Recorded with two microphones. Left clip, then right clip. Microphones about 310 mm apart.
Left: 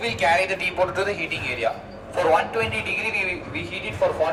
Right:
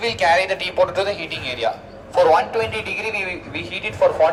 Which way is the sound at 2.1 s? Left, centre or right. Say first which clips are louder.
Right 5 dB; right.